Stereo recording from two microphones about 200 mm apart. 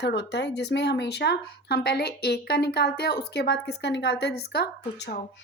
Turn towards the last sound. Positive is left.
turn(degrees=55)  # may be behind; listen again after turning